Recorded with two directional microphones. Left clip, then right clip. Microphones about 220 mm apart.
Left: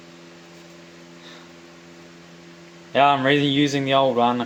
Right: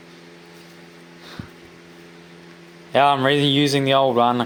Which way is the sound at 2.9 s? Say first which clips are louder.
Right 1 dB; 40° right (ahead or behind).